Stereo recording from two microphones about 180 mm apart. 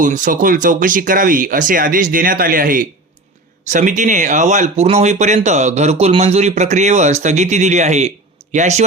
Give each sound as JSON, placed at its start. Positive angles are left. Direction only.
{"t": 0.0, "sound": "speech", "side_deg": -45}